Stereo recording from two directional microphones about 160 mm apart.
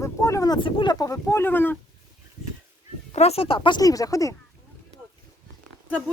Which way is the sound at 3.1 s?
40° left (ahead or behind).